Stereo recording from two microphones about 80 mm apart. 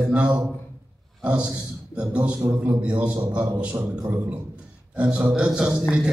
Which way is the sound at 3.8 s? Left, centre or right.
Right.